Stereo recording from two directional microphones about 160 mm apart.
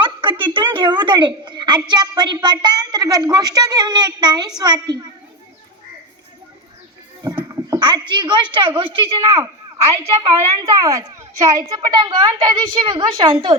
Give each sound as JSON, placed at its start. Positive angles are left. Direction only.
{"t": 0.0, "sound": "a woman's voice", "side_deg": -30}
{"t": 7.3, "sound": "a sound", "side_deg": -15}
{"t": 8.8, "sound": "a child's voice", "side_deg": -35}
{"t": 9.2, "sound": "a child's voice", "side_deg": -15}